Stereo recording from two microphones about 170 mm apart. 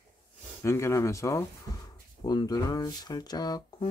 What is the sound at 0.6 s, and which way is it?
Speech, 15° left (ahead or behind).